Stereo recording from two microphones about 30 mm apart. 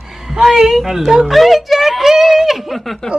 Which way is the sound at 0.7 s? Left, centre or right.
Centre.